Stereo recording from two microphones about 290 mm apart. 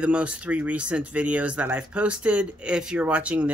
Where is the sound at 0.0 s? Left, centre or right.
Centre.